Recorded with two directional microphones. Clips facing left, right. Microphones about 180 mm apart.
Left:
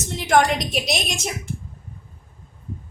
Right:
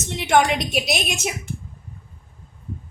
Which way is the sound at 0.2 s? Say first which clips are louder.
Even; centre (ahead or behind).